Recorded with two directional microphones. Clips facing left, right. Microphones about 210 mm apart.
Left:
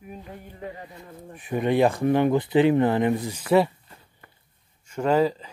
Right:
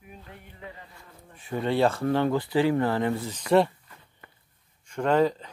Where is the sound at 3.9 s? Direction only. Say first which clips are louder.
Left 2 dB; 30° left (ahead or behind).